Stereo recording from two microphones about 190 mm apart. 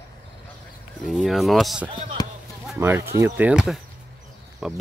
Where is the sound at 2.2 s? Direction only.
20° left (ahead or behind).